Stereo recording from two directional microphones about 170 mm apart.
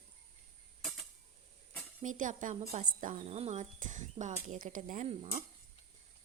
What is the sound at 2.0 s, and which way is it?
A woman's voice, 50° right (ahead or behind).